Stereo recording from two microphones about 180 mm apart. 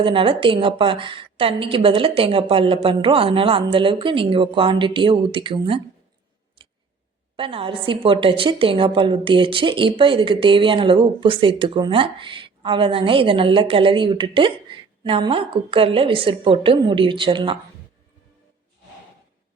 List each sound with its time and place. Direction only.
0.0 s a woman's voice: 30° right (ahead or behind)
6.6 s scissors: 30° right (ahead or behind)
7.3 s a woman's voice: 30° right (ahead or behind)